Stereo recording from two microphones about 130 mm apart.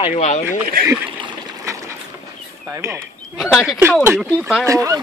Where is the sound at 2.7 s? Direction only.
20° right (ahead or behind).